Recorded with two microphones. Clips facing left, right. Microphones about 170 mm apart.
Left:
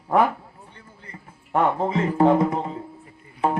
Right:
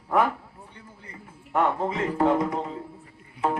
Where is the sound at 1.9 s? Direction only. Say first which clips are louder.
Left 4 dB; 25° left (ahead or behind).